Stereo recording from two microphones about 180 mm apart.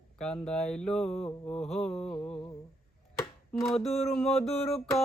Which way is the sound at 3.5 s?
Centre (ahead or behind).